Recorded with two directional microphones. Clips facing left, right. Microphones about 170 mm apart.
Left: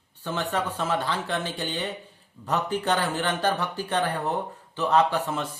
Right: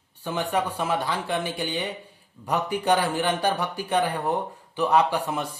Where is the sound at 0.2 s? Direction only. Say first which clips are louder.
Right 2 dB; 10° right (ahead or behind).